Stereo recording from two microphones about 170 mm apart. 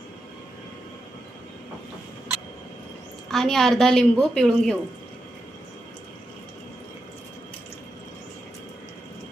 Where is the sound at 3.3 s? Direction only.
Centre (ahead or behind).